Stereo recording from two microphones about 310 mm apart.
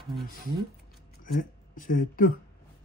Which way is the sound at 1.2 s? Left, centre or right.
Left.